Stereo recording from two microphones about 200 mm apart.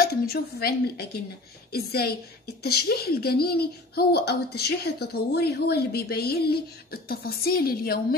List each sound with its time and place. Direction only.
0.0 s speech: 50° left (ahead or behind)